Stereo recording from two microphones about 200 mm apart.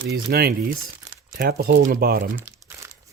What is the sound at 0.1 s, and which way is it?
Speech, 50° right (ahead or behind).